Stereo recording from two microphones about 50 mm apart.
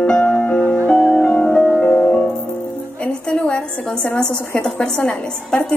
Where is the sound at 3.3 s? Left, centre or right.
Centre.